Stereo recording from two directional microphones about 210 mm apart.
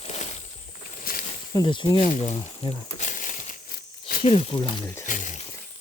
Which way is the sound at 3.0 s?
35° left (ahead or behind).